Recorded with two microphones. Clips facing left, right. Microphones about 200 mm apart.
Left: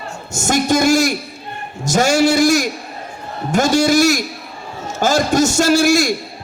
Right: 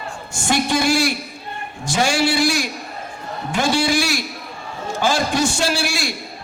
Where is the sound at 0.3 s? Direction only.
45° left (ahead or behind).